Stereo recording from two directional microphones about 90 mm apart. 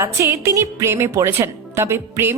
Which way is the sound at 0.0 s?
30° right (ahead or behind).